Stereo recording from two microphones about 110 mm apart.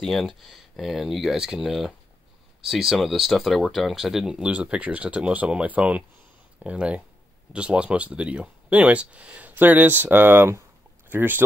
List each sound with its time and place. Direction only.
0.0 s speech: centre (ahead or behind); by 11.4 s 20° right (ahead or behind)